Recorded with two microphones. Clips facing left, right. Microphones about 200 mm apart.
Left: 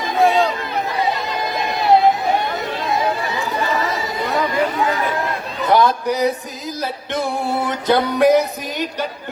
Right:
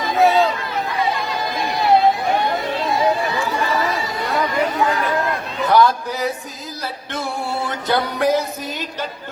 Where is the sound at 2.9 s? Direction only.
20° left (ahead or behind).